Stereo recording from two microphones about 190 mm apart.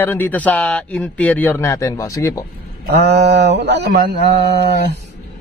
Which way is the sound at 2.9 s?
65° right (ahead or behind).